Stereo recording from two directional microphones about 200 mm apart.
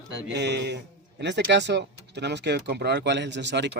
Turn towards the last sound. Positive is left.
turn(degrees=-60)  # may be behind; listen again after turning